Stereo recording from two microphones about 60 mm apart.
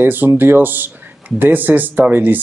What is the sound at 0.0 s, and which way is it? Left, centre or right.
Speech, right.